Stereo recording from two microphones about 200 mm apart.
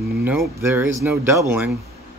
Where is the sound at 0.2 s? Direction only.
10° right (ahead or behind).